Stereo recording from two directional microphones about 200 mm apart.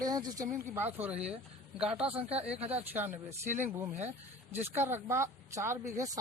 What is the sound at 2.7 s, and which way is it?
Speech, 10° right (ahead or behind).